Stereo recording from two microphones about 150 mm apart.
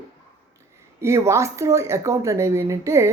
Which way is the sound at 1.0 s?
20° right (ahead or behind).